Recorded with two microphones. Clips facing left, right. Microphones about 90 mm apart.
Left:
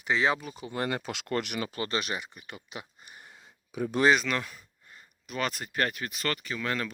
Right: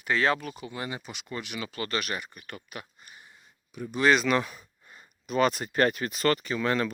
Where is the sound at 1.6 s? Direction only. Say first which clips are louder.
Even; 30° left (ahead or behind).